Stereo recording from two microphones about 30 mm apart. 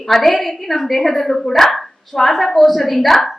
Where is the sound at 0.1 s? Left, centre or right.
Centre.